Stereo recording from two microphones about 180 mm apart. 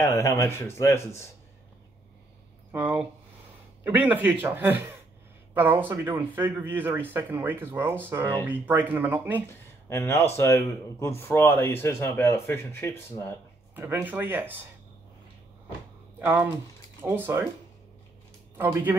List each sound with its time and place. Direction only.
0.0 s speech: 15° left (ahead or behind)
2.7 s speech: 10° right (ahead or behind)
9.8 s speech: 15° left (ahead or behind)
13.7 s speech: 10° right (ahead or behind)
16.2 s speech: 10° right (ahead or behind)
18.6 s speech: 10° right (ahead or behind)